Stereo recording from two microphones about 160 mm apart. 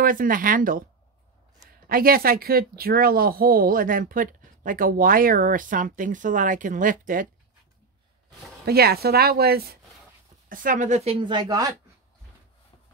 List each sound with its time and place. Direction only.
0.0 s speech: 60° right (ahead or behind)
1.9 s speech: 65° right (ahead or behind)
8.6 s speech: 75° right (ahead or behind)
10.5 s speech: 55° right (ahead or behind)
11.1 s speech: 30° right (ahead or behind)